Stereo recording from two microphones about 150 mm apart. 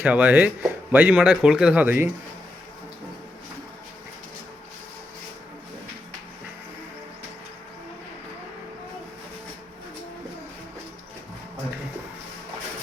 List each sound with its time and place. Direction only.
0.0 s speech: 10° right (ahead or behind)